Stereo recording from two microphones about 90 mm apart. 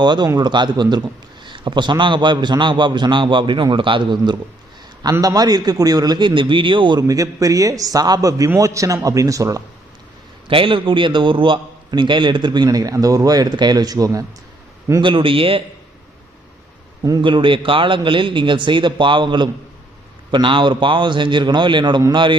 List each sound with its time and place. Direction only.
0.0 s a man's voice: 55° right (ahead or behind)
1.5 s a man's voice: 65° right (ahead or behind)
5.2 s a man's voice: 45° right (ahead or behind); by 7.0 s 65° right (ahead or behind)
7.1 s a man's voice: 40° right (ahead or behind)
10.5 s a man's voice: 75° right (ahead or behind); by 14.3 s 40° right (ahead or behind)
15.0 s speech: 70° right (ahead or behind)
17.2 s a man's voice: 70° right (ahead or behind)